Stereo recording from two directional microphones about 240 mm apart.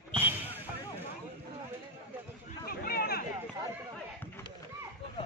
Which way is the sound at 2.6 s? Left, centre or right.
Left.